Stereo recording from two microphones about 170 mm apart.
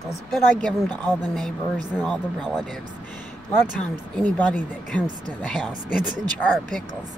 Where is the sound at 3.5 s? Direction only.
10° left (ahead or behind).